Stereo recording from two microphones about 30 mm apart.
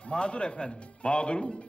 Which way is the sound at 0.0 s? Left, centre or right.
Left.